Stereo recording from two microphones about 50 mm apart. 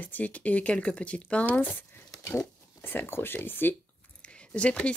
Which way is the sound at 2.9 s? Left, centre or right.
Left.